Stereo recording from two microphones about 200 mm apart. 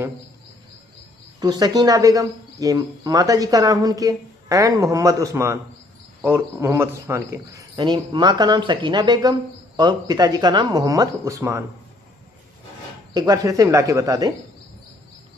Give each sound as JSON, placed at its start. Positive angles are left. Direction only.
{"t": 1.4, "sound": "speech", "side_deg": -20}
{"t": 13.1, "sound": "speech", "side_deg": -20}